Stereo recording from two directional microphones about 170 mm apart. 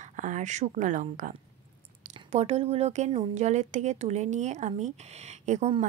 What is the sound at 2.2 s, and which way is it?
A woman's voice, 35° right (ahead or behind).